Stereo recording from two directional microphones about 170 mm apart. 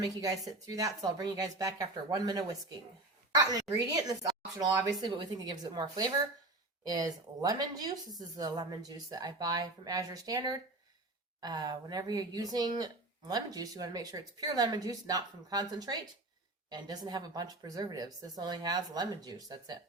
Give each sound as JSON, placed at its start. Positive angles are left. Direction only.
{"t": 0.2, "sound": "speech", "side_deg": -20}